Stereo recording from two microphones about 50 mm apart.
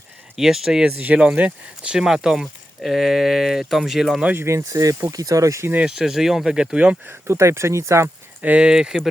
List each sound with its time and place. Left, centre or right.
0.3 s speech: centre
0.9 s speech: right
1.2 s speech: centre
2.8 s speech: centre
4.4 s speech: right
5.4 s speech: right
5.8 s speech: centre
7.1 s speech: right
8.4 s speech: right
8.6 s speech: centre